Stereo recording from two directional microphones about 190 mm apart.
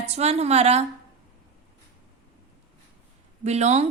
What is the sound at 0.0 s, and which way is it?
Speech, 35° right (ahead or behind).